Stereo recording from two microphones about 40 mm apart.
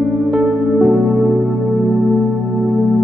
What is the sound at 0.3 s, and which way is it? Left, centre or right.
Music, centre.